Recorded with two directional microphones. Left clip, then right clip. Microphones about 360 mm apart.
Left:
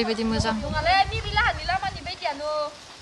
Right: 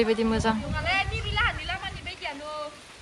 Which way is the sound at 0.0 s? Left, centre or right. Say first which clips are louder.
Right 1 dB; centre.